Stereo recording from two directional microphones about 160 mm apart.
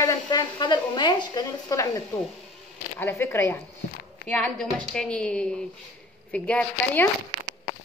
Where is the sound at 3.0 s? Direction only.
15° left (ahead or behind).